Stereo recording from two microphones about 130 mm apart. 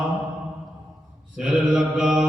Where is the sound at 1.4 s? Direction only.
5° right (ahead or behind).